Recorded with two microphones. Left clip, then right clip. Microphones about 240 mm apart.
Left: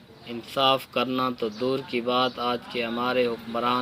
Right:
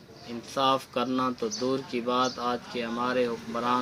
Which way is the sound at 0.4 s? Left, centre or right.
Centre.